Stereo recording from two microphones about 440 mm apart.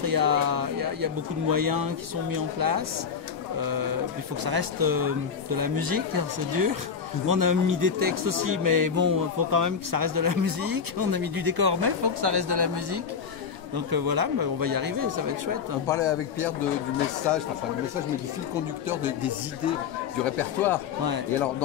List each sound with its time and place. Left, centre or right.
0.0 s a man's voice: right
15.9 s a man's voice: centre
18.9 s speech: centre